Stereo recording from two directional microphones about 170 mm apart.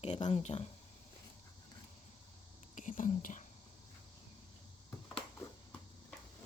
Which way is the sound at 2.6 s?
45° left (ahead or behind).